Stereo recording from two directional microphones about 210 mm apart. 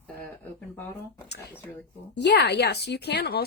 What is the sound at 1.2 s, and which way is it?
Speech, 50° left (ahead or behind).